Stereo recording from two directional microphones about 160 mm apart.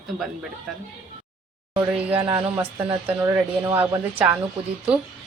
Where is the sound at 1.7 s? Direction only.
10° right (ahead or behind).